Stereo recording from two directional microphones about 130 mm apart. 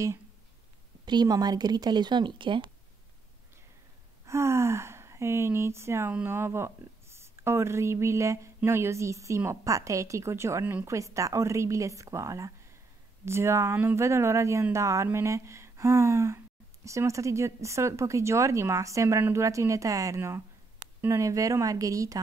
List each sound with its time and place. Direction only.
1.0 s speech: 30° right (ahead or behind)
4.3 s speech: 20° right (ahead or behind)